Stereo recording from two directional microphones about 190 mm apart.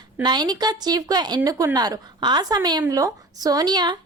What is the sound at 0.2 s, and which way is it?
Speech, 25° right (ahead or behind).